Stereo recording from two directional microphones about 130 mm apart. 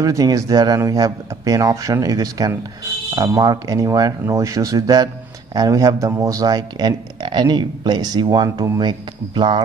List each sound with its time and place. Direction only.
0.0 s speech: 25° right (ahead or behind)